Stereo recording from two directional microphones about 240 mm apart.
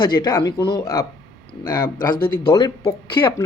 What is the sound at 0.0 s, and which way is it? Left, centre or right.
Speech, centre.